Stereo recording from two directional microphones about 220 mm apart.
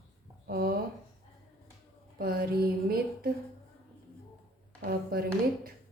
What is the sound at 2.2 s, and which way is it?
Speech, 40° right (ahead or behind).